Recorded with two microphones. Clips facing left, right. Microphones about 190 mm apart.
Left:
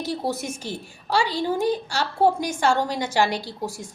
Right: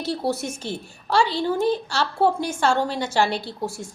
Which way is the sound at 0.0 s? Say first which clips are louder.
Right 2 dB; 15° left (ahead or behind).